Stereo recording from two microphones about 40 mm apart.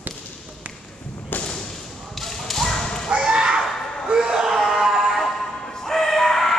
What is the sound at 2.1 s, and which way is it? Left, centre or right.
Whip, centre.